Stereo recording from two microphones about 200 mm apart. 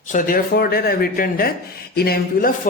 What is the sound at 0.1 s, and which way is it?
A man's voice, 40° left (ahead or behind).